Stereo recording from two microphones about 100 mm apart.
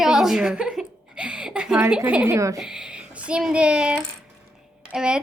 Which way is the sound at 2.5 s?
5° right (ahead or behind).